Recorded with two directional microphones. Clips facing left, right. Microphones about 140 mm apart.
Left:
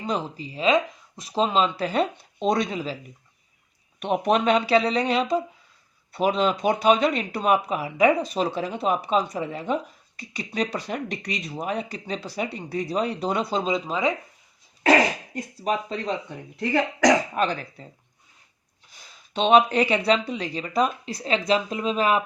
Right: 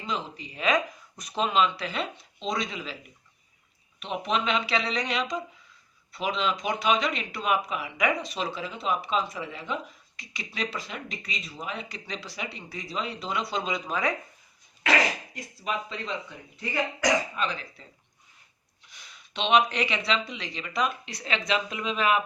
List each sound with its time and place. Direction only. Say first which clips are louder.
0.0 s speech: left 5 dB; 40° left (ahead or behind)
4.0 s speech: left 8 dB; 55° left (ahead or behind); by 8.4 s 35° left (ahead or behind)
8.5 s speech: left 5 dB; 50° left (ahead or behind)
11.1 s speech: left 7 dB; 60° left (ahead or behind)
11.5 s speech: left 8 dB; 45° left (ahead or behind)
13.7 s speech: left 5 dB; 30° left (ahead or behind)
15.6 s speech: left 6 dB; 40° left (ahead or behind)
16.6 s speech: left 8 dB; 60° left (ahead or behind)
18.9 s speech: left 7 dB; 40° left (ahead or behind)